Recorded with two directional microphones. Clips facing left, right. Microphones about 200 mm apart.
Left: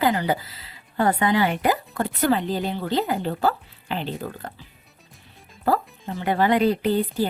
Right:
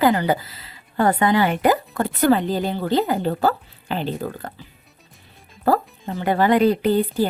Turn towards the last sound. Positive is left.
turn(degrees=-45)  # may be behind; listen again after turning